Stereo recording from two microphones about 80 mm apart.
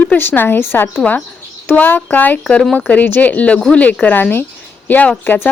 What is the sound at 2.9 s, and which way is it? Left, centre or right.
Speech, left.